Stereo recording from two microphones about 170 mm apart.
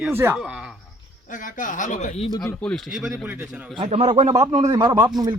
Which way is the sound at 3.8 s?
35° right (ahead or behind).